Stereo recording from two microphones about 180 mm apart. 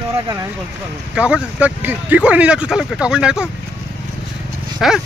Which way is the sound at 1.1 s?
5° right (ahead or behind).